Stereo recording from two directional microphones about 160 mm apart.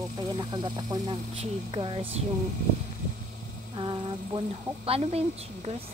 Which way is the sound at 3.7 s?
30° right (ahead or behind).